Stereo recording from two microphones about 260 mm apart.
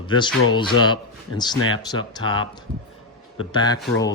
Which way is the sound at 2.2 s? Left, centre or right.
Left.